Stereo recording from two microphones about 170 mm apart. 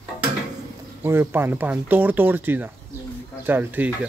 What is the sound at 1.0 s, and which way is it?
Speech, 15° right (ahead or behind).